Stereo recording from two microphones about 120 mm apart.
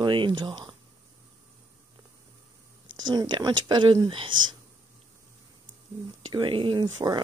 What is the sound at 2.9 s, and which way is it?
Speech, 40° right (ahead or behind).